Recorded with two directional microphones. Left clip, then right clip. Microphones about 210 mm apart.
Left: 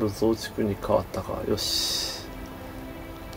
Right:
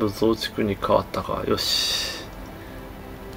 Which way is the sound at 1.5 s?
30° right (ahead or behind).